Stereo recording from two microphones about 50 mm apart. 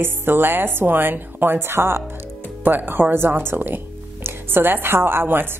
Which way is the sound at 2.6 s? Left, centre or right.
Right.